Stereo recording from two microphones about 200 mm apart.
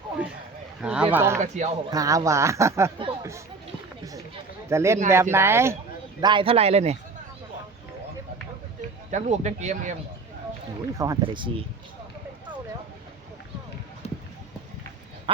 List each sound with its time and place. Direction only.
0.8 s speech: 5° right (ahead or behind)
1.4 s speech: 40° right (ahead or behind)
1.9 s speech: 15° right (ahead or behind)
4.7 s speech: 15° right (ahead or behind)
6.2 s a man's voice: 25° right (ahead or behind)
9.0 s speech: 35° right (ahead or behind)
10.9 s a man's voice: 15° right (ahead or behind)